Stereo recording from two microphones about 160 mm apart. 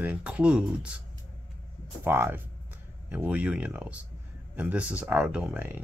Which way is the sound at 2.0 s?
15° right (ahead or behind).